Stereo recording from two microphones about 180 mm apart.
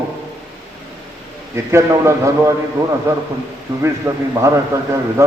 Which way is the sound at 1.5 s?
15° right (ahead or behind).